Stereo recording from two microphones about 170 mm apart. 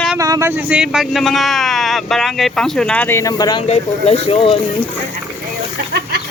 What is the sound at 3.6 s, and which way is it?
Speech, 35° left (ahead or behind).